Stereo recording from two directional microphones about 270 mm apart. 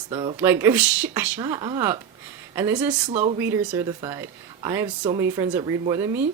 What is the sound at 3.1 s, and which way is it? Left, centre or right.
Speech, right.